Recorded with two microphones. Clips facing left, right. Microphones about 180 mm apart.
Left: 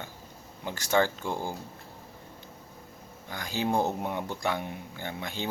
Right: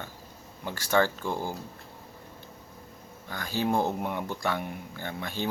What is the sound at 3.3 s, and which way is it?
Speech, 15° left (ahead or behind).